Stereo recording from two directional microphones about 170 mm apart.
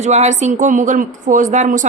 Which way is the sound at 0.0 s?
40° right (ahead or behind).